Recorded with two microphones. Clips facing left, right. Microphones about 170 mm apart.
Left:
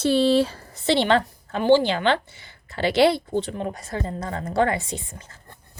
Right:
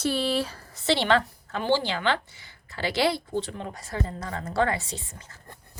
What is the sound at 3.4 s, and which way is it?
Speech, 60° left (ahead or behind).